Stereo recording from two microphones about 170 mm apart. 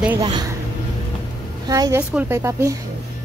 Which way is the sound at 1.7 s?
20° right (ahead or behind).